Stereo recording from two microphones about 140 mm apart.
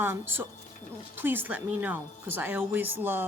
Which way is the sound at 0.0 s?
15° right (ahead or behind).